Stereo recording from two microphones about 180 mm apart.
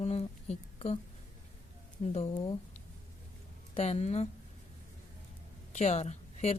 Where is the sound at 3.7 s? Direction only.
35° left (ahead or behind).